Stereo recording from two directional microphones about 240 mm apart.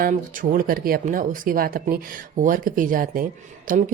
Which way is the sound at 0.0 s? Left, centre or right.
Right.